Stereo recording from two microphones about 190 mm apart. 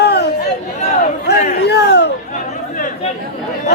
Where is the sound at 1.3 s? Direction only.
60° left (ahead or behind).